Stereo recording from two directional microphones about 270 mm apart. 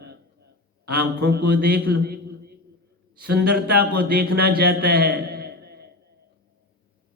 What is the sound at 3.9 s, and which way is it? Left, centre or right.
A man's voice, right.